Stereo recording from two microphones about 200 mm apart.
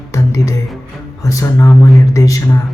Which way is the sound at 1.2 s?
15° left (ahead or behind).